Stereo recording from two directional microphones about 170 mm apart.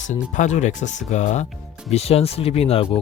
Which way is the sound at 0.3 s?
45° left (ahead or behind).